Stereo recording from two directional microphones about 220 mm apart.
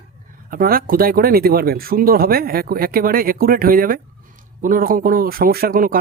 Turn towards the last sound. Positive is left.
turn(degrees=-40)  # may be behind; listen again after turning